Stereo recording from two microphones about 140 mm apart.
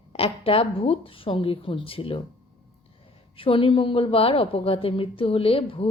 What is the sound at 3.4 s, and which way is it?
A woman's voice, 40° left (ahead or behind).